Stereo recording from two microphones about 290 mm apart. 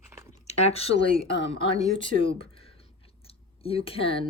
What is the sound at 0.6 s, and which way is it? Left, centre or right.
Speech, left.